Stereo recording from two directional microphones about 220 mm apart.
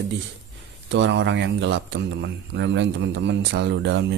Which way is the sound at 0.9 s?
55° right (ahead or behind).